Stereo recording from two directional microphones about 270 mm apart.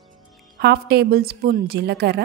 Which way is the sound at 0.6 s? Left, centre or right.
Right.